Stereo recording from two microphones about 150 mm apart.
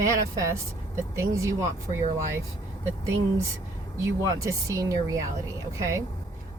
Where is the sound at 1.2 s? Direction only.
20° right (ahead or behind).